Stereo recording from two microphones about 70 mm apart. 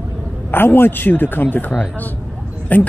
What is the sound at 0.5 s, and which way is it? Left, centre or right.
Speech, left.